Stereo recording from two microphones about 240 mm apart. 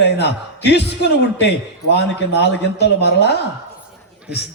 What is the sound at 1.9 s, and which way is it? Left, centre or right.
A man's voice, left.